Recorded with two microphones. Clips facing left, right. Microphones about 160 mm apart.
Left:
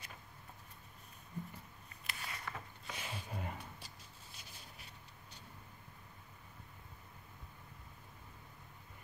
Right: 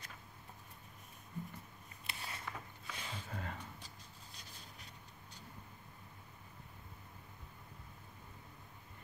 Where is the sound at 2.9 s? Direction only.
10° left (ahead or behind).